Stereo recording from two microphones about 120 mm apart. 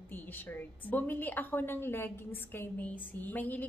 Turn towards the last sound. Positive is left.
turn(degrees=15)  # may be behind; listen again after turning